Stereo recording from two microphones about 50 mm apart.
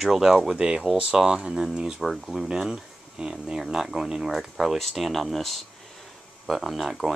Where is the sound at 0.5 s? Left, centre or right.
Centre.